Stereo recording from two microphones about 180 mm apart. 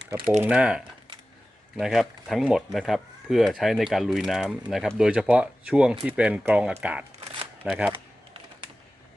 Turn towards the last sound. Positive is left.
turn(degrees=-5)  # may be behind; listen again after turning